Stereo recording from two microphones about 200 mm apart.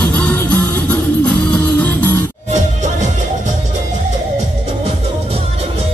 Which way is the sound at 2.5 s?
35° right (ahead or behind).